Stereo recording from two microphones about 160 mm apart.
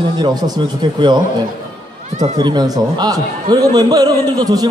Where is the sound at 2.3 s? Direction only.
25° right (ahead or behind).